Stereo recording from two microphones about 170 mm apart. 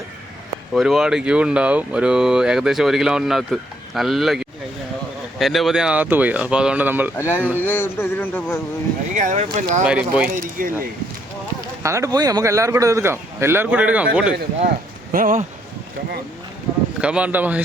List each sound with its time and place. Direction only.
0.7 s a man's voice: centre (ahead or behind)
7.2 s a man's voice: 15° left (ahead or behind)
9.1 s speech: 45° right (ahead or behind)
9.8 s speech: 5° right (ahead or behind)
10.3 s speech: 55° right (ahead or behind)
11.8 s a man's voice: 15° right (ahead or behind)
15.1 s speech: 50° right (ahead or behind)
17.0 s a man's voice: 5° right (ahead or behind)